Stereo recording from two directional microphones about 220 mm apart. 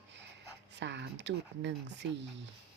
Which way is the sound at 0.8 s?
55° right (ahead or behind).